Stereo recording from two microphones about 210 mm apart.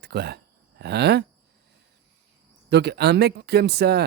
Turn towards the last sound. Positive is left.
turn(degrees=-50)  # may be behind; listen again after turning